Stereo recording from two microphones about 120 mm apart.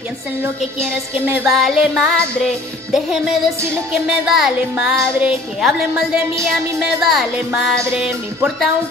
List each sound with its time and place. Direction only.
0.7 s music: 15° right (ahead or behind)
1.4 s music: centre (ahead or behind)